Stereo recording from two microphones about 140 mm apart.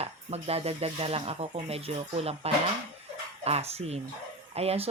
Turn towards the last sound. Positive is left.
turn(degrees=-45)  # may be behind; listen again after turning